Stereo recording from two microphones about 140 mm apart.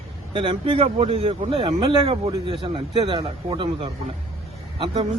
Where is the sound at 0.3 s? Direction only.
35° right (ahead or behind).